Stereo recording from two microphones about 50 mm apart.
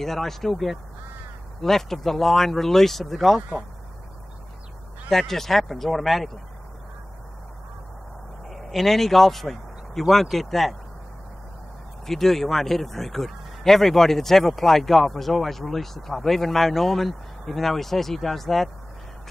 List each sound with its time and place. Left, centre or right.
0.0 s speech: centre
5.1 s speech: centre
8.5 s speech: centre
12.1 s speech: centre